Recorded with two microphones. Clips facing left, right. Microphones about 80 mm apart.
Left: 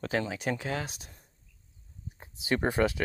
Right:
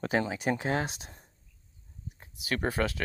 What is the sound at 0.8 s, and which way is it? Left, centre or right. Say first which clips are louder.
Speech: right 5 dB; right.